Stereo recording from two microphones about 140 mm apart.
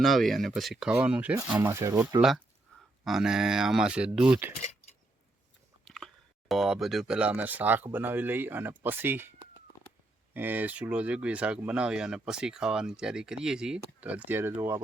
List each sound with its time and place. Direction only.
0.0 s speech: centre (ahead or behind); by 2.2 s 20° right (ahead or behind)
3.0 s speech: centre (ahead or behind)
5.8 s chewing: 5° left (ahead or behind)
6.5 s speech: centre (ahead or behind)
10.3 s speech: 15° right (ahead or behind)